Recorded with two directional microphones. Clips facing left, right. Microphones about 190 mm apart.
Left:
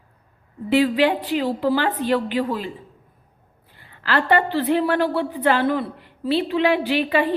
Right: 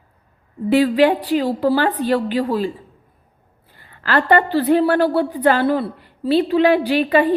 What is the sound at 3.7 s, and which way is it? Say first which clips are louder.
A woman's voice: right 3 dB; 45° right (ahead or behind).